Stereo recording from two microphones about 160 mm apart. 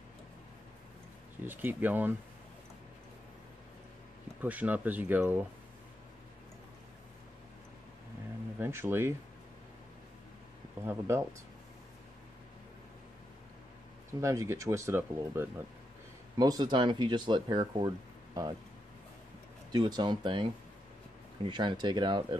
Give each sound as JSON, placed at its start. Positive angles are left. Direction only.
{"t": 1.4, "sound": "speech", "side_deg": -10}
{"t": 4.4, "sound": "speech", "side_deg": -10}
{"t": 8.5, "sound": "speech", "side_deg": -15}
{"t": 10.9, "sound": "speech", "side_deg": -15}
{"t": 14.2, "sound": "speech", "side_deg": -20}
{"t": 19.7, "sound": "speech", "side_deg": -30}